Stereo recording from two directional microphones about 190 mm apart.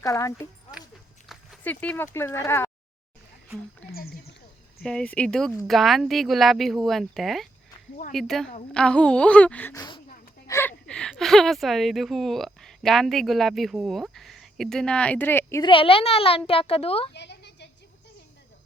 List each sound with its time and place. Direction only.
0.0 s a woman's voice: 15° left (ahead or behind)
1.3 s dog: centre (ahead or behind)
1.7 s a woman's voice: 10° left (ahead or behind)
3.9 s speech: 55° left (ahead or behind)
4.8 s a woman's voice: 5° left (ahead or behind)
15.7 s speech: 30° left (ahead or behind)
17.2 s a sound: 65° left (ahead or behind)